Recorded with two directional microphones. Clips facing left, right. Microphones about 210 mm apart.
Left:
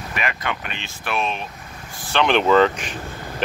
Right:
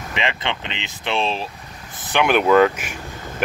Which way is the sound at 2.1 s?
10° right (ahead or behind).